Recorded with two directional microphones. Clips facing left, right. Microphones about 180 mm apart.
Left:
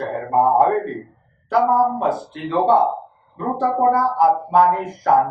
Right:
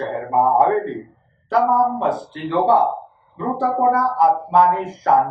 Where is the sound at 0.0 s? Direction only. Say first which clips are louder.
Even; centre (ahead or behind).